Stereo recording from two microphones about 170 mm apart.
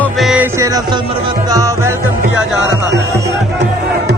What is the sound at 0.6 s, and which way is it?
Music, 20° right (ahead or behind).